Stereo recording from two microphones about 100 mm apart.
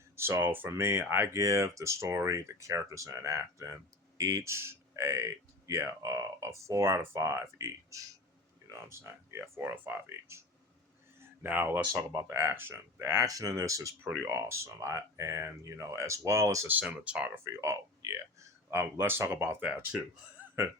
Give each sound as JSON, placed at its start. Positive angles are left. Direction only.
{"t": 0.2, "sound": "speech", "side_deg": -25}
{"t": 11.2, "sound": "a sound", "side_deg": -20}
{"t": 11.9, "sound": "speech", "side_deg": -35}
{"t": 16.6, "sound": "speech", "side_deg": -15}
{"t": 17.4, "sound": "speech", "side_deg": -30}